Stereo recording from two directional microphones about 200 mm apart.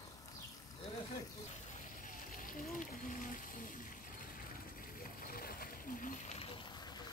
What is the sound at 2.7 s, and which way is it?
Speech, 40° left (ahead or behind).